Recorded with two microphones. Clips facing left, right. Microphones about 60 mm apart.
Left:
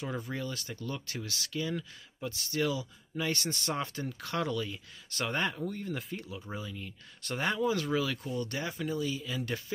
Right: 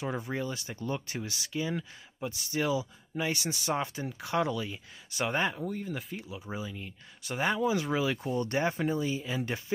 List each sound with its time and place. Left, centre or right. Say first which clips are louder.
0.0 s speech: right 3 dB; right